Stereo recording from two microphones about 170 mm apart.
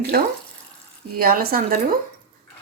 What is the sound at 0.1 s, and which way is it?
Speech, 65° right (ahead or behind).